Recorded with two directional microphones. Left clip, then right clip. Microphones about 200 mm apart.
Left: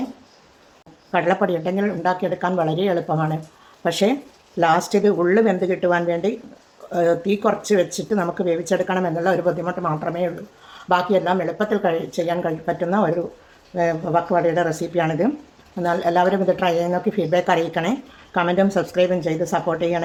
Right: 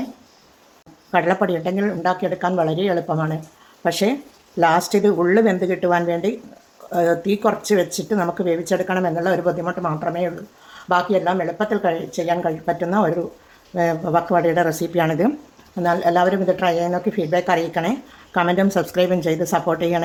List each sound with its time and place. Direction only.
1.1 s speech: 10° right (ahead or behind)